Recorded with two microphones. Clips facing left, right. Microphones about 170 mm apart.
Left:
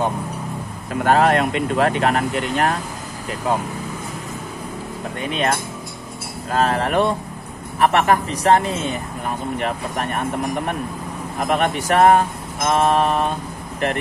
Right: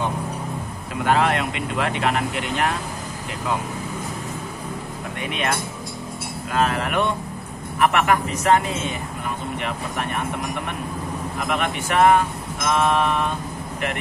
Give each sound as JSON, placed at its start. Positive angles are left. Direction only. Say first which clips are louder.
{"t": 1.0, "sound": "speech", "louder": "left 4 dB", "side_deg": 45}
{"t": 5.2, "sound": "speech", "louder": "left 4 dB", "side_deg": 35}
{"t": 11.3, "sound": "speech", "louder": "left 6 dB", "side_deg": 40}